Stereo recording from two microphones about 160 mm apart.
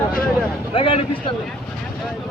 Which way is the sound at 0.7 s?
35° left (ahead or behind).